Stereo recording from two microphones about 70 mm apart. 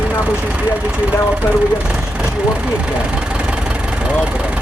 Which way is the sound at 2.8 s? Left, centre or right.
Centre.